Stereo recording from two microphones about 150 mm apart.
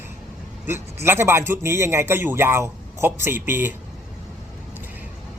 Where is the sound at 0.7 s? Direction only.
15° right (ahead or behind).